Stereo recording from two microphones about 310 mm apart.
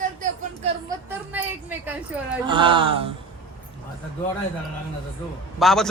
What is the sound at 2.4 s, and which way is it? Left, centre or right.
Speech, centre.